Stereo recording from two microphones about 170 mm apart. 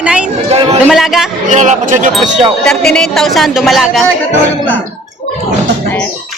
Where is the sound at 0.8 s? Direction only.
Centre (ahead or behind).